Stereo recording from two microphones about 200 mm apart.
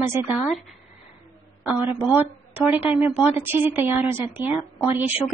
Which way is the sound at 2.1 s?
10° right (ahead or behind).